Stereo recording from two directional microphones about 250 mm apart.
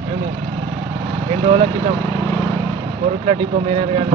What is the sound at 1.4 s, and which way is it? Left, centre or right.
Speech, right.